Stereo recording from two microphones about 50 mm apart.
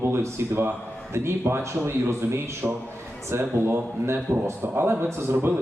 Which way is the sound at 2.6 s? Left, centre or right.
Right.